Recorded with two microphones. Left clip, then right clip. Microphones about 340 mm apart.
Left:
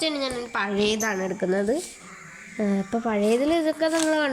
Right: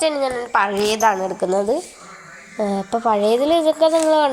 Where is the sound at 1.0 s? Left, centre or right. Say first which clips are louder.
Right 9 dB; right.